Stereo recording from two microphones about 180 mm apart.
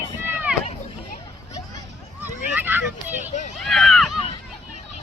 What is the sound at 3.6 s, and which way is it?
Run, centre (ahead or behind).